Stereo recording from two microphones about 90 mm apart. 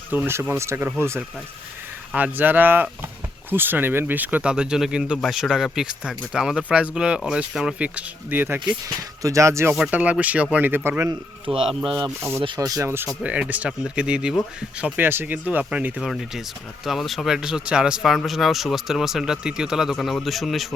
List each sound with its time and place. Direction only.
0.1 s speech: 20° right (ahead or behind)
2.1 s speech: 20° right (ahead or behind)
9.0 s speech: 35° right (ahead or behind)
9.7 s speech: 15° right (ahead or behind)
11.5 s speech: 70° right (ahead or behind)
12.5 s speech: 40° right (ahead or behind)
13.2 s speech: 15° right (ahead or behind)
14.9 s speech: 20° right (ahead or behind)
16.0 s speech: centre (ahead or behind)